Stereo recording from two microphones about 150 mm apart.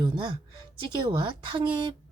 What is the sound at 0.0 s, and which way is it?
A woman's voice, 30° right (ahead or behind).